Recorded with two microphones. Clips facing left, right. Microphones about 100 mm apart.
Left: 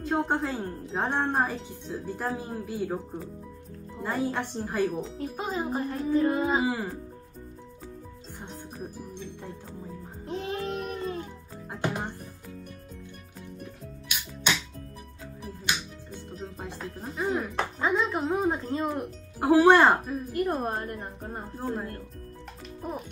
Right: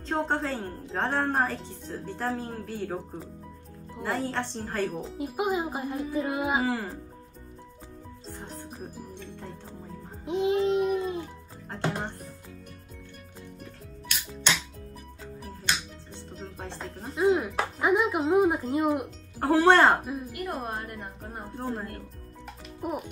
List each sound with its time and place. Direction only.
0.0 s speech: 10° left (ahead or behind)
5.1 s music: 10° right (ahead or behind)
6.6 s speech: 10° left (ahead or behind)
8.4 s music: 10° left (ahead or behind)
9.0 s speech: centre (ahead or behind)
10.2 s music: 15° right (ahead or behind)
11.7 s music: 10° left (ahead or behind)
16.3 s music: 5° left (ahead or behind); by 19.0 s 15° right (ahead or behind)
19.4 s speech: 10° left (ahead or behind)
20.3 s a woman's voice: 35° left (ahead or behind)
21.5 s speech: centre (ahead or behind)
22.8 s a child's voice: 10° right (ahead or behind)